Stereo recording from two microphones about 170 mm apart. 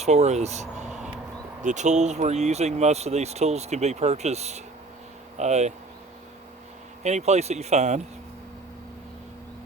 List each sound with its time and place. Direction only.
0.0 s speech: 40° right (ahead or behind)
7.0 s speech: 40° right (ahead or behind)